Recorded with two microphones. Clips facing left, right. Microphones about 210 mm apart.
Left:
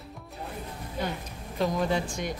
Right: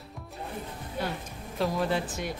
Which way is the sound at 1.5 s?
Centre (ahead or behind).